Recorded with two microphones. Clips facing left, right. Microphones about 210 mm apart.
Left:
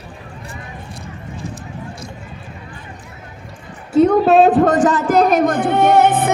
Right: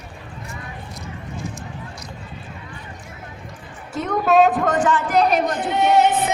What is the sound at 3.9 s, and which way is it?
A man's voice, 30° left (ahead or behind).